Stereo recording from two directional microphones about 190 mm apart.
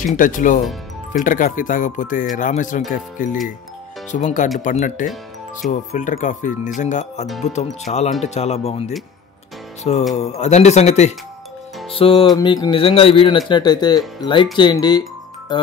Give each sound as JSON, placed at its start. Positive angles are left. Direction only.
{"t": 0.0, "sound": "speech", "side_deg": 45}
{"t": 10.1, "sound": "speech", "side_deg": 35}
{"t": 11.9, "sound": "music", "side_deg": 30}
{"t": 14.6, "sound": "speech", "side_deg": 20}